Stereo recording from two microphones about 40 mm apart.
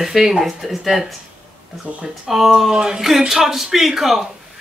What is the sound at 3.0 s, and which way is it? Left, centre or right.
Music, centre.